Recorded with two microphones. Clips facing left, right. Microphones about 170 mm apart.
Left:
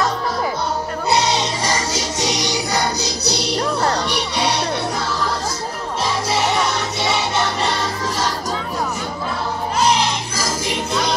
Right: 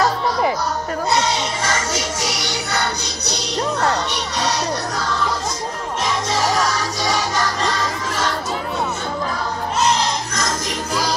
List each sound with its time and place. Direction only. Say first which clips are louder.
1.3 s music: left 1 dB; 35° left (ahead or behind)
2.4 s music: left 3 dB; 15° left (ahead or behind)
3.0 s music: left 5 dB; 35° left (ahead or behind)
3.8 s children playing: left 1 dB; 30° left (ahead or behind)
7.0 s music: left 1 dB; 25° left (ahead or behind)